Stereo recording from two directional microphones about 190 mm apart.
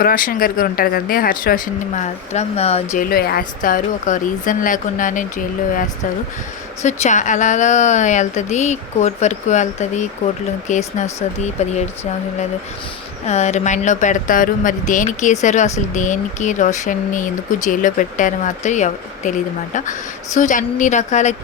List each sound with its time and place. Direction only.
0.0 s speech: 50° left (ahead or behind)
3.0 s speech: 55° left (ahead or behind)
6.8 s speech: 40° left (ahead or behind)
13.2 s speech: 35° left (ahead or behind)